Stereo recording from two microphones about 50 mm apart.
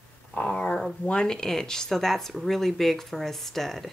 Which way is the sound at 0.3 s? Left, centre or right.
Left.